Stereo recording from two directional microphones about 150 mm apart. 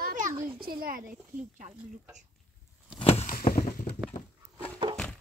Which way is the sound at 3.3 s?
70° left (ahead or behind).